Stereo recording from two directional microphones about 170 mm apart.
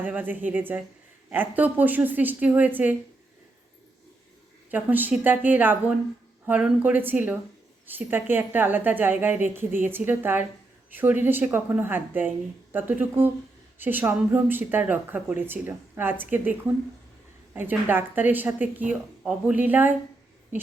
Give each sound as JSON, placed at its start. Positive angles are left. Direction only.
{"t": 0.0, "sound": "speech", "side_deg": -10}
{"t": 4.7, "sound": "speech", "side_deg": -10}